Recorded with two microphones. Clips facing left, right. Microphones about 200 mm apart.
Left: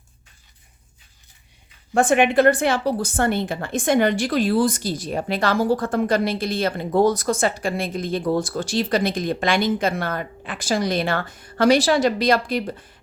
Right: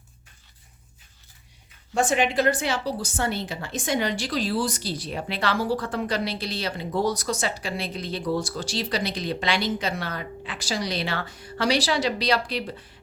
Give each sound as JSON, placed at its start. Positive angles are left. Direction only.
{"t": 1.9, "sound": "a woman's voice", "side_deg": 55}